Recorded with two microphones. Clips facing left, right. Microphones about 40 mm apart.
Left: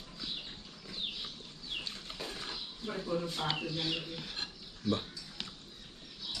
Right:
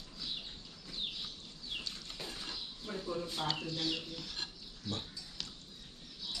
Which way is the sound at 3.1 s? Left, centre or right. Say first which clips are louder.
Left 5 dB; left.